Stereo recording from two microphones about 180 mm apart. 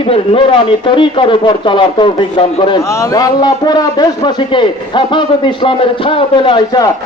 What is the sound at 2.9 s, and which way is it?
A man's voice, 15° left (ahead or behind).